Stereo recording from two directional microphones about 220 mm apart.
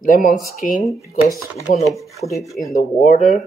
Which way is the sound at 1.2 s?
15° left (ahead or behind).